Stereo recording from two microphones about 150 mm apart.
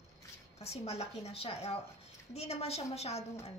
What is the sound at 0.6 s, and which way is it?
A woman's voice, 45° left (ahead or behind).